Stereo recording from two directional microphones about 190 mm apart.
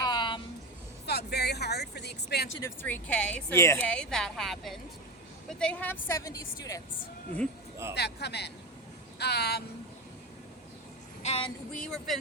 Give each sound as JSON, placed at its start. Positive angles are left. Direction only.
{"t": 0.0, "sound": "music", "side_deg": 20}
{"t": 1.0, "sound": "a sound", "side_deg": 60}
{"t": 2.6, "sound": "speech", "side_deg": 15}
{"t": 7.9, "sound": "speech", "side_deg": 60}
{"t": 11.2, "sound": "a sound", "side_deg": 35}
{"t": 11.7, "sound": "speech", "side_deg": 5}